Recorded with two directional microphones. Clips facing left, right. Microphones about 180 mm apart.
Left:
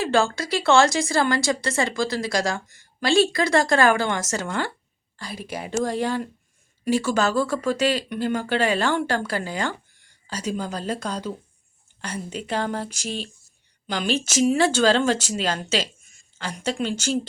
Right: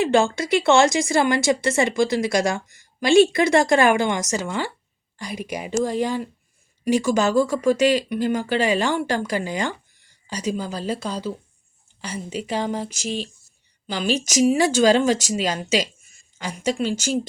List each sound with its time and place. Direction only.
0.0 s speech: 20° right (ahead or behind)